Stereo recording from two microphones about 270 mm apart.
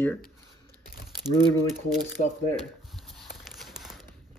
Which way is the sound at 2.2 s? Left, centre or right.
Left.